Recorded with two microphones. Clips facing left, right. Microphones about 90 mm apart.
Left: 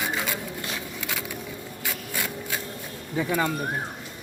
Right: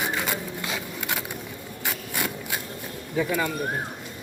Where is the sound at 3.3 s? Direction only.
40° left (ahead or behind).